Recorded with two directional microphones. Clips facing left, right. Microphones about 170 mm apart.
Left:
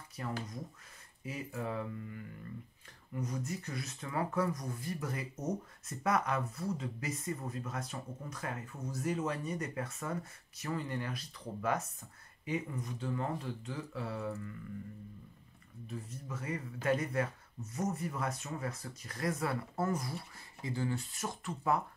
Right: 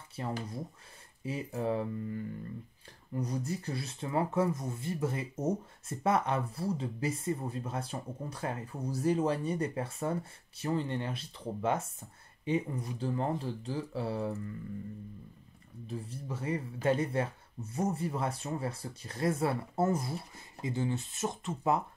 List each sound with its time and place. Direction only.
0.1 s speech: 25° right (ahead or behind)
15.9 s speech: 30° right (ahead or behind)